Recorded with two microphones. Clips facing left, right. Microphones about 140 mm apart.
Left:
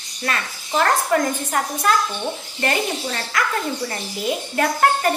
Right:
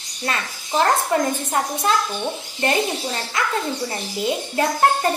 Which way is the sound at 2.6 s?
20° right (ahead or behind).